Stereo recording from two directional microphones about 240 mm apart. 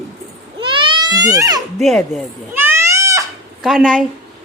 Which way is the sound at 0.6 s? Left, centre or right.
Right.